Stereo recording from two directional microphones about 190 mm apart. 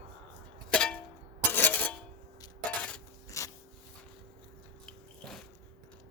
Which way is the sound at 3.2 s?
15° left (ahead or behind).